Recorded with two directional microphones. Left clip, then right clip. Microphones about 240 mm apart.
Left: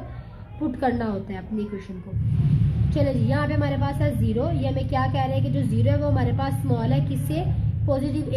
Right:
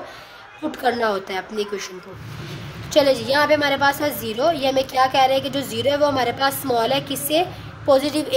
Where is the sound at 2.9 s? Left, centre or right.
Right.